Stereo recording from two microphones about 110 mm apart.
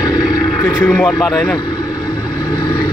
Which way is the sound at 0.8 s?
10° left (ahead or behind).